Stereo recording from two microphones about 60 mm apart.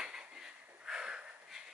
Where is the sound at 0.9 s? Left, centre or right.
Centre.